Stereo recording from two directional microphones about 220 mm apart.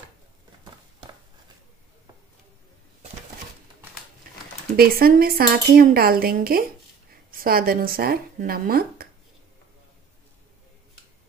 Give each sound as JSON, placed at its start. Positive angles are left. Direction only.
{"t": 4.7, "sound": "a woman's voice", "side_deg": -45}